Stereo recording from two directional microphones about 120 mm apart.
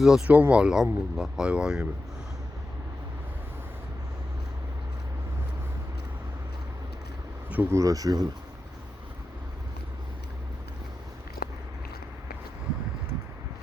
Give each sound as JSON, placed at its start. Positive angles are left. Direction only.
{"t": 0.0, "sound": "speech", "side_deg": -5}
{"t": 7.5, "sound": "speech", "side_deg": -20}